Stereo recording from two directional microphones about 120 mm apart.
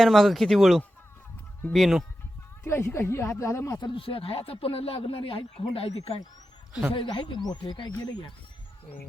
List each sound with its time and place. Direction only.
0.0 s speech: centre (ahead or behind)
2.6 s speech: 20° left (ahead or behind)
3.8 s speech: 45° left (ahead or behind)
6.9 s speech: 40° left (ahead or behind)